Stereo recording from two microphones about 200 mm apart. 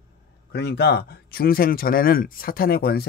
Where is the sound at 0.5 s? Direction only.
55° left (ahead or behind).